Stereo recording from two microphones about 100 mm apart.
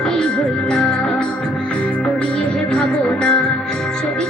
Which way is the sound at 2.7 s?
10° left (ahead or behind).